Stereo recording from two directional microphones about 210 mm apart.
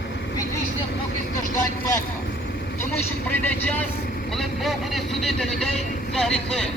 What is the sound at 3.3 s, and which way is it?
Vehicle, 10° left (ahead or behind).